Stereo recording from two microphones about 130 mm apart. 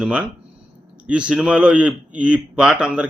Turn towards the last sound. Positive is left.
turn(degrees=-10)  # may be behind; listen again after turning